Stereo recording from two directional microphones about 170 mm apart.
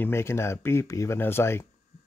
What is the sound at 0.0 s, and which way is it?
Speech, 15° left (ahead or behind).